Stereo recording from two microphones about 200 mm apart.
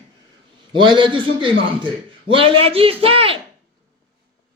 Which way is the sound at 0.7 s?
25° right (ahead or behind).